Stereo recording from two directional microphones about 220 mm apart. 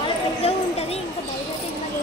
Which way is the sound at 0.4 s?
25° left (ahead or behind).